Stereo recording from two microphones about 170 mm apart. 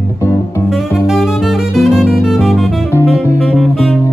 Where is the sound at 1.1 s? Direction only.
Centre (ahead or behind).